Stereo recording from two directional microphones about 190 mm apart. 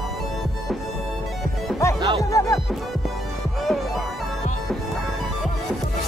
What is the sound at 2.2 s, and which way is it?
Music, 15° left (ahead or behind).